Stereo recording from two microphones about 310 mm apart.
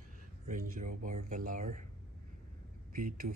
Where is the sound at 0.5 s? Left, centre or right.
Right.